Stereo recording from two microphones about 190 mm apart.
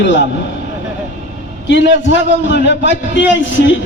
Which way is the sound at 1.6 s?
70° left (ahead or behind).